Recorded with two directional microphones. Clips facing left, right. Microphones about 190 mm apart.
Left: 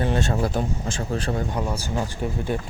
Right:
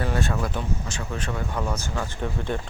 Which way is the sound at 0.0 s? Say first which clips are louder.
Left 3 dB; 25° left (ahead or behind).